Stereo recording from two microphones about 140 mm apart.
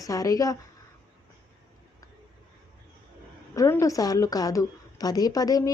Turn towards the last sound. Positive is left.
turn(degrees=25)  # may be behind; listen again after turning